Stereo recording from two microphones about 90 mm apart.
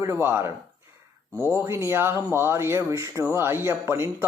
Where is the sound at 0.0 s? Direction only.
30° right (ahead or behind).